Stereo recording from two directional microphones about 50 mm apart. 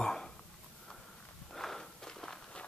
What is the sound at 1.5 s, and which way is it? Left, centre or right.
Walk, centre.